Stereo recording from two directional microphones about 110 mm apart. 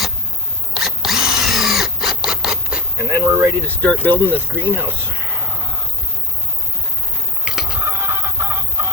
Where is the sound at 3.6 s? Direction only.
15° left (ahead or behind).